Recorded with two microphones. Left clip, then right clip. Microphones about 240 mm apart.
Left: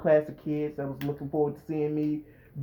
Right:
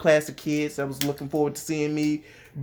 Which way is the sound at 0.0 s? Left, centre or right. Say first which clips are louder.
Right 3 dB; right.